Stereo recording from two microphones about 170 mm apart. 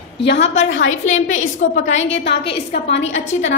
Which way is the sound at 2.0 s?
90° left.